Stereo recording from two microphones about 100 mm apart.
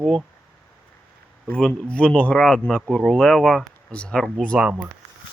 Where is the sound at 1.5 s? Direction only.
10° left (ahead or behind).